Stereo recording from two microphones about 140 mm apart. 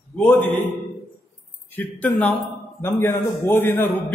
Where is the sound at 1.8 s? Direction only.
15° left (ahead or behind).